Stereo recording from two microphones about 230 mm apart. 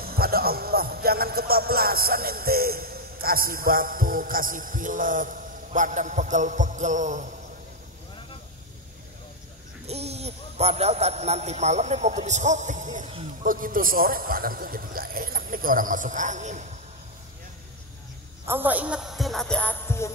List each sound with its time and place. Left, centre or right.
0.0 s speech: right
9.8 s a man's voice: right
18.5 s speech: centre